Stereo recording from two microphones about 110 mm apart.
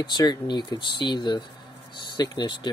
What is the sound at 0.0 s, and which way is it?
Speech, 40° left (ahead or behind).